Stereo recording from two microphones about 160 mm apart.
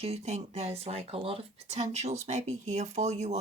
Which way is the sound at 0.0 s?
40° right (ahead or behind).